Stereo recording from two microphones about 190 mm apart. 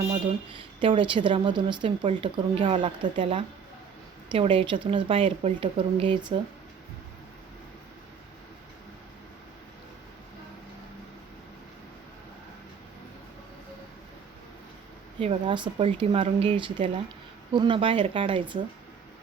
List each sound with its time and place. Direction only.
0.1 s speech: 25° right (ahead or behind)
15.2 s speech: 30° right (ahead or behind)